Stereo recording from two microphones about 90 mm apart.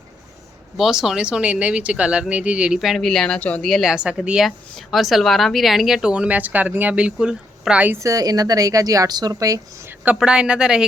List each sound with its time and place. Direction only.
0.8 s speech: 5° right (ahead or behind)
2.7 s speech: centre (ahead or behind)
3.6 s speech: centre (ahead or behind)
8.0 s a woman's voice: 40° right (ahead or behind)
10.2 s speech: 10° right (ahead or behind)